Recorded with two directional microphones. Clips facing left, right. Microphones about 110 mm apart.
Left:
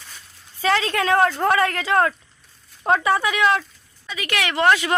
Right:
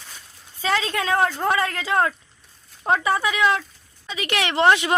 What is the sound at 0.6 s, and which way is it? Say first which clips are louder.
A woman's voice: left 3 dB; 25° right (ahead or behind).